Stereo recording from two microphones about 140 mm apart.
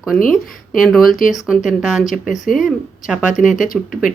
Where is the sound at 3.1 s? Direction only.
5° right (ahead or behind).